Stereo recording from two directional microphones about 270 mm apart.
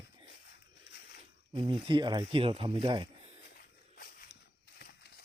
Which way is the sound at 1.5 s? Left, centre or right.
Centre.